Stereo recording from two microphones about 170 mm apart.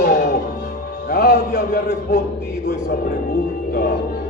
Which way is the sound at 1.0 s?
70° left (ahead or behind).